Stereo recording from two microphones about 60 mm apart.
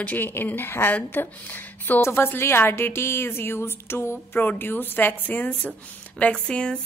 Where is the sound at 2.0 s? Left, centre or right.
Left.